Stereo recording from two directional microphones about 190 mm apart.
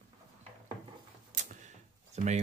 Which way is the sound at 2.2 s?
35° right (ahead or behind).